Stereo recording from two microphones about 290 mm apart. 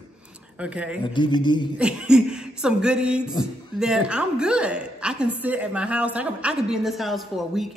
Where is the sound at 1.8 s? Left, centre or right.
Centre.